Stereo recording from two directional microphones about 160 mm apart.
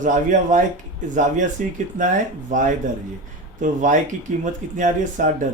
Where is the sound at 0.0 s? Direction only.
50° right (ahead or behind).